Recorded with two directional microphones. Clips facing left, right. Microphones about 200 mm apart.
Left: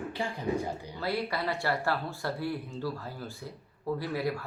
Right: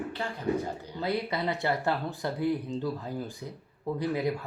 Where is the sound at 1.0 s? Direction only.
20° right (ahead or behind).